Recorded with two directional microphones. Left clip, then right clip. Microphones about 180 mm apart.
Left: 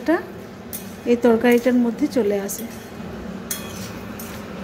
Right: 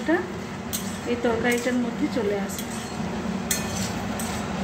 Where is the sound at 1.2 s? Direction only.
45° left (ahead or behind).